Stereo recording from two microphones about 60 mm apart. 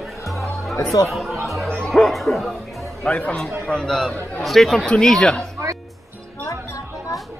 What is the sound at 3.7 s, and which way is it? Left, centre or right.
Speech, centre.